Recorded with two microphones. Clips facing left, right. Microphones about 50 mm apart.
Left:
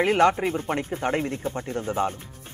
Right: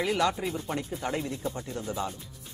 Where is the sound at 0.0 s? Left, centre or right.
Left.